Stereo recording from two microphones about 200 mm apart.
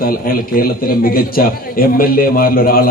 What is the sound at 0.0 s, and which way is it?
A man's voice, 45° left (ahead or behind).